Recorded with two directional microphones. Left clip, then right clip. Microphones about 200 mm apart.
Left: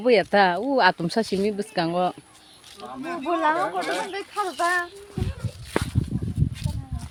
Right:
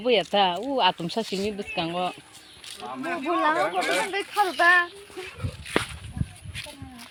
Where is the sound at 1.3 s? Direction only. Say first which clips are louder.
Left 4 dB; 25° left (ahead or behind).